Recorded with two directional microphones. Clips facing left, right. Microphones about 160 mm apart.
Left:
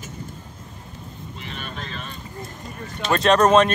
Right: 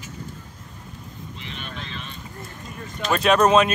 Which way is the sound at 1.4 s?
45° left (ahead or behind).